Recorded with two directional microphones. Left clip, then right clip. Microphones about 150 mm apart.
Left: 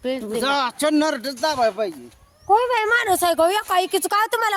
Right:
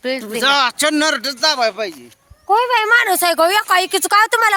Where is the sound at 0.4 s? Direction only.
10° left (ahead or behind); by 1.9 s 35° left (ahead or behind).